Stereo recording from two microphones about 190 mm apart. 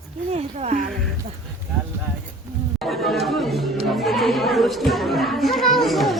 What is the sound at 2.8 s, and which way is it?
Speech, centre (ahead or behind).